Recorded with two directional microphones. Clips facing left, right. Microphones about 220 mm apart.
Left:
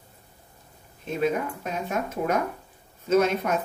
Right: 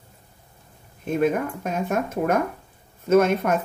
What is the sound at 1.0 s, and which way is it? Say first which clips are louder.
Speech: right 4 dB; 50° right (ahead or behind).